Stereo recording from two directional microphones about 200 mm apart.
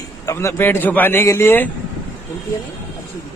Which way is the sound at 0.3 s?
15° left (ahead or behind).